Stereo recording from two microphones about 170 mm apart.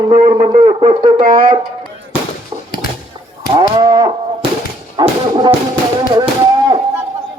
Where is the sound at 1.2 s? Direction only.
55° right (ahead or behind).